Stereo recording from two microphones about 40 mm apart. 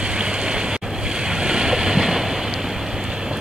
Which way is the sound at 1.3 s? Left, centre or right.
Centre.